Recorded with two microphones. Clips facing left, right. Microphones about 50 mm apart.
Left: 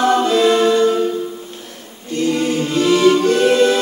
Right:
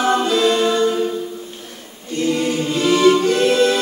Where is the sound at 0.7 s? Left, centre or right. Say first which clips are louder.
Left 3 dB; centre.